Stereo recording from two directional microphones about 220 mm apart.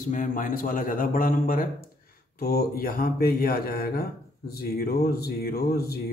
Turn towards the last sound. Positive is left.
turn(degrees=45)  # may be behind; listen again after turning